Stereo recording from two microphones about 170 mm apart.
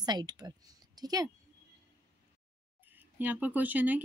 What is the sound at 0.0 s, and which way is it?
Speech, 25° right (ahead or behind).